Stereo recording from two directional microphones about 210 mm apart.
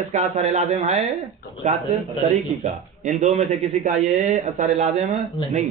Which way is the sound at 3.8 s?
35° right (ahead or behind).